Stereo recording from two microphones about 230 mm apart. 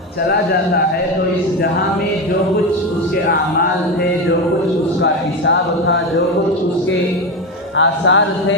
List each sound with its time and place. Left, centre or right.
5.0 s speech: left
7.8 s speech: left